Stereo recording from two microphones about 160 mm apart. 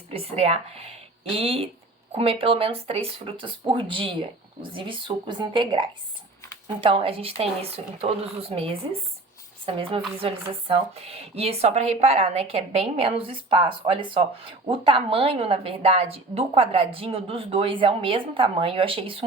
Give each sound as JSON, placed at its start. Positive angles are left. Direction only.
{"t": 0.1, "sound": "speech", "side_deg": -40}
{"t": 6.8, "sound": "speech", "side_deg": -35}